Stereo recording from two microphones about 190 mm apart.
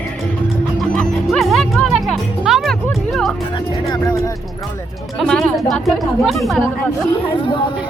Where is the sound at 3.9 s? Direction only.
20° left (ahead or behind).